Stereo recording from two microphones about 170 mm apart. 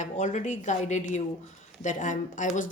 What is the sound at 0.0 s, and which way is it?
Speech, 45° left (ahead or behind).